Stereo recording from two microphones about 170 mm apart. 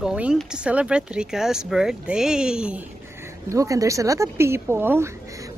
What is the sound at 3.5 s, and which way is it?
Speech, 20° right (ahead or behind).